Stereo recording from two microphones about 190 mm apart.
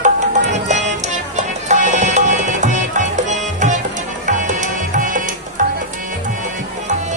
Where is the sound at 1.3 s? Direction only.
40° right (ahead or behind).